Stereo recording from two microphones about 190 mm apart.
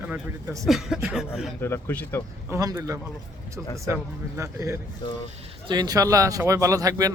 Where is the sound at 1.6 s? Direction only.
10° left (ahead or behind).